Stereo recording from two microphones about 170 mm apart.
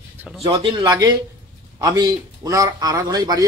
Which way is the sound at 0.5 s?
25° right (ahead or behind).